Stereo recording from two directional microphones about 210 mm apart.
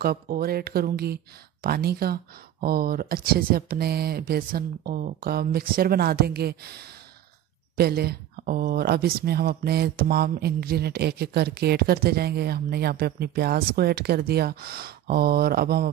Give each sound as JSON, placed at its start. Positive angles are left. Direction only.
{"t": 0.0, "sound": "speech", "side_deg": -45}